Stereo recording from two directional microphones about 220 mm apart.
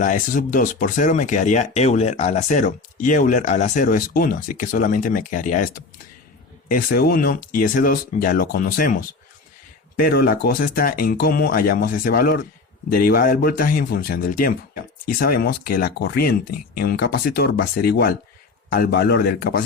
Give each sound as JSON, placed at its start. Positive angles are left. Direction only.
{"t": 0.0, "sound": "speech", "side_deg": 35}